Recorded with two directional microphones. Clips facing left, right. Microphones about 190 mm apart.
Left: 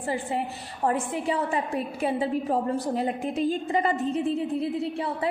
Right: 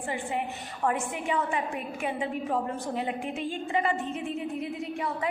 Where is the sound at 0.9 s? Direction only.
35° left (ahead or behind).